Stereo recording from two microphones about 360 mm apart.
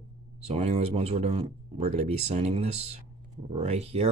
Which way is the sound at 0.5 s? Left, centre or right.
Centre.